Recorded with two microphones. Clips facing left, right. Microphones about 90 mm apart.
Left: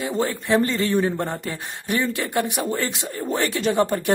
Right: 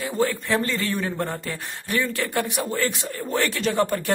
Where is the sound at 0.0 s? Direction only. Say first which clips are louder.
Even; 20° left (ahead or behind).